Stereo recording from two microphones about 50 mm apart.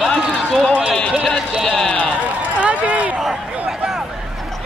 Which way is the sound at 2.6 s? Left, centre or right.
Right.